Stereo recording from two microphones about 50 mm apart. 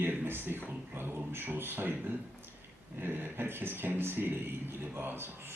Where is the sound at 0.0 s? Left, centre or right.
Right.